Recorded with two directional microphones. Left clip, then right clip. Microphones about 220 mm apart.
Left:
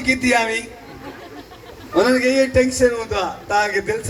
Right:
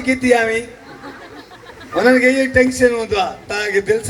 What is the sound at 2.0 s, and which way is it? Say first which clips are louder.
A man's voice: right 7 dB; 30° right (ahead or behind).